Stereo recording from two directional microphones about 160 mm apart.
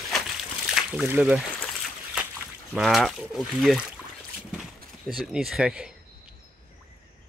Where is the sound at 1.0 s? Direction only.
5° right (ahead or behind).